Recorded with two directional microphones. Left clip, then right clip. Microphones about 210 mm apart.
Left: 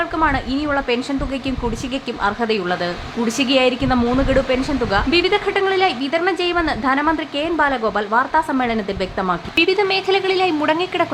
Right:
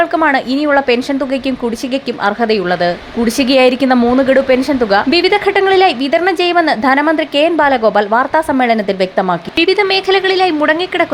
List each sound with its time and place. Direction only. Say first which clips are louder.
0.0 s a woman's voice: right 7 dB; 20° right (ahead or behind)